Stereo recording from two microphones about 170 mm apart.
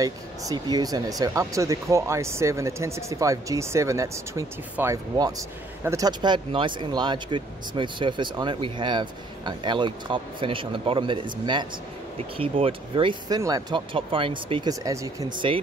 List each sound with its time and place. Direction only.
0.0 s speech: 20° right (ahead or behind)